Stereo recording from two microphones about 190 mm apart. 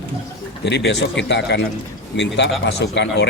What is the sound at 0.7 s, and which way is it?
A man's voice, 65° left (ahead or behind).